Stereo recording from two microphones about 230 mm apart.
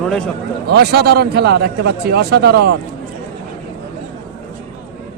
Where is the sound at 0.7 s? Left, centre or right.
Right.